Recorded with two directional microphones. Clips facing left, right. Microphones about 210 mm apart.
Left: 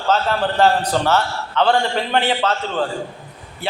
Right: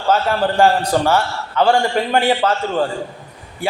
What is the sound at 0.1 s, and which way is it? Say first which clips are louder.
A man's voice: right 2 dB; 10° right (ahead or behind).